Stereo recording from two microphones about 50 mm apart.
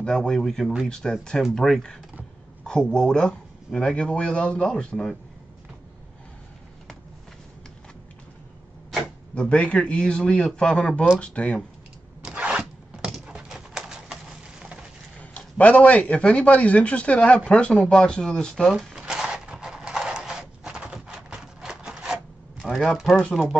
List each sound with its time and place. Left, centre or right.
0.1 s speech: centre
9.3 s speech: left
12.4 s zipper: centre
13.3 s pigeon: centre
14.6 s a sound: centre
15.1 s a man's voice: left
18.9 s a sound: centre
22.6 s a sound: centre
23.3 s speech: centre